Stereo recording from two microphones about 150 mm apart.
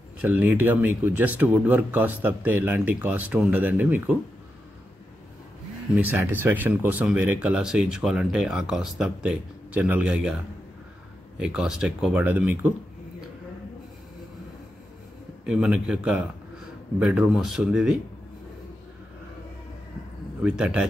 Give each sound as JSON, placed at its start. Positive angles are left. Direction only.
{"t": 0.2, "sound": "speech", "side_deg": -10}
{"t": 5.9, "sound": "speech", "side_deg": -10}
{"t": 11.3, "sound": "speech", "side_deg": -5}
{"t": 15.4, "sound": "speech", "side_deg": -5}
{"t": 20.4, "sound": "speech", "side_deg": -5}